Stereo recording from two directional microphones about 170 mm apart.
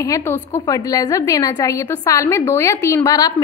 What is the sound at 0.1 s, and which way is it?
A woman's voice, 20° left (ahead or behind).